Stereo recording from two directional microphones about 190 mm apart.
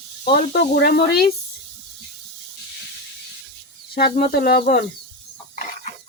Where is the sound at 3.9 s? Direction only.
50° left (ahead or behind).